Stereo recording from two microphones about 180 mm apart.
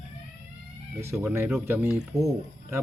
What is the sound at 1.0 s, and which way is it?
Speech, 15° right (ahead or behind).